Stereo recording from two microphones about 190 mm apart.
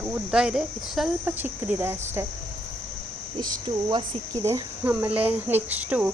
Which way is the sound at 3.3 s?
20° right (ahead or behind).